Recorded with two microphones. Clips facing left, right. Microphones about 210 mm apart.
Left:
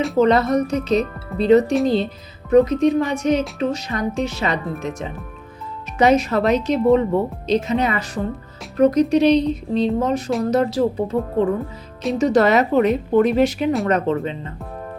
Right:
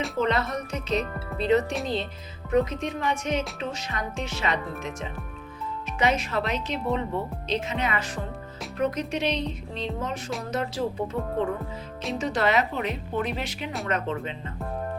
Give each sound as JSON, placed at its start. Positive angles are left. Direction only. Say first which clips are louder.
{"t": 0.2, "sound": "a woman's voice", "louder": "left 11 dB", "side_deg": 40}